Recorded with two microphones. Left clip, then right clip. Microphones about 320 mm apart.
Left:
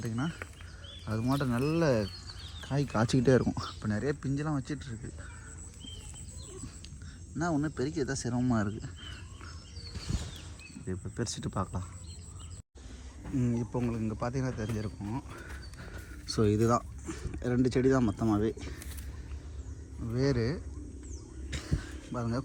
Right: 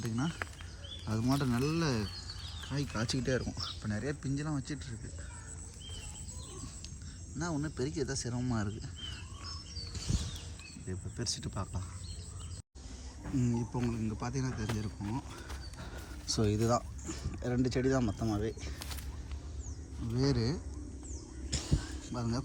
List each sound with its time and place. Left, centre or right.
0.0 s speech: centre
7.3 s speech: centre
9.9 s a sound: centre
10.8 s speech: centre
13.4 s speech: centre
20.1 s speech: centre
21.5 s a sound: centre